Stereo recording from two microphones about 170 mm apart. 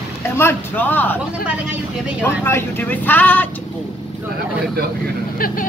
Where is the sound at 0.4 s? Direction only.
10° left (ahead or behind).